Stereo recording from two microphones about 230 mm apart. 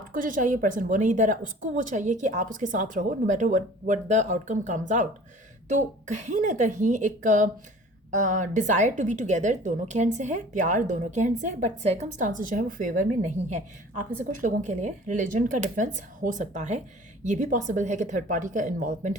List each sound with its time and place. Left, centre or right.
0.1 s a woman's voice: right